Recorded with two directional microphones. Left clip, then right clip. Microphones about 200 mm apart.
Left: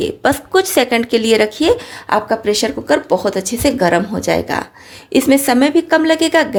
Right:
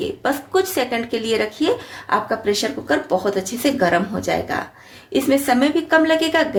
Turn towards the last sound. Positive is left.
turn(degrees=40)  # may be behind; listen again after turning